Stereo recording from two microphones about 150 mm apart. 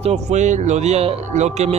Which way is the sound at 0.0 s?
45° right (ahead or behind).